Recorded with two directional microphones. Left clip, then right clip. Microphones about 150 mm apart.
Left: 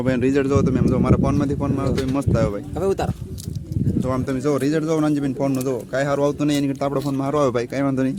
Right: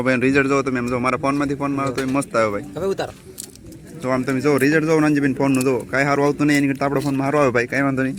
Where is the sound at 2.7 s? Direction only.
90° left.